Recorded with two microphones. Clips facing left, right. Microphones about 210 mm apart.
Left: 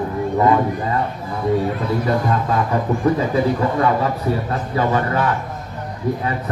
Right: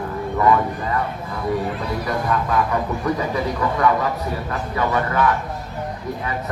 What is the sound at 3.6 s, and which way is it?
Speech, 30° left (ahead or behind).